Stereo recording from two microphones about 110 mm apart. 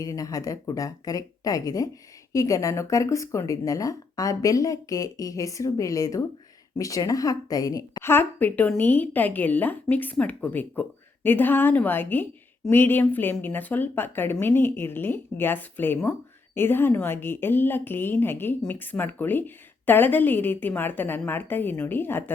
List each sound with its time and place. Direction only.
0.0 s speech: 35° left (ahead or behind)
8.0 s a woman's voice: 20° left (ahead or behind)